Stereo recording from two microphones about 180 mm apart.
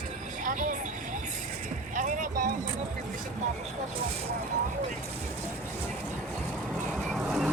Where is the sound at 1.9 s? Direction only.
45° right (ahead or behind).